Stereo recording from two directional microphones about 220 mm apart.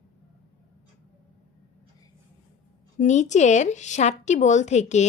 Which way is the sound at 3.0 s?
35° left (ahead or behind).